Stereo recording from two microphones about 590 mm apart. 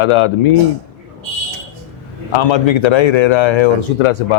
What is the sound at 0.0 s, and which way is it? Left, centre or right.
Speech, left.